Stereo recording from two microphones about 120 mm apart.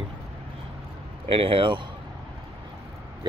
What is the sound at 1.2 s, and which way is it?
Speech, 50° right (ahead or behind).